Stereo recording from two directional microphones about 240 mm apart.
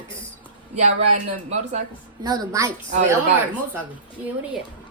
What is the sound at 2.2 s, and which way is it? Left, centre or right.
Speech, centre.